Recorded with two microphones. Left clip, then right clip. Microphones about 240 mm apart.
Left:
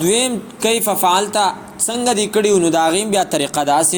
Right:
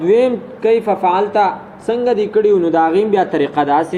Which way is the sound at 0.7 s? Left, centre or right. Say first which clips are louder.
Right 2 dB; left.